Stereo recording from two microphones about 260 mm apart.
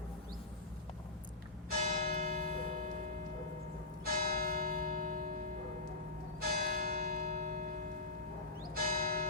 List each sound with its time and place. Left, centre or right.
1.8 s church bell: right
4.0 s church bell: right
6.7 s church bell: right
8.7 s church bell: right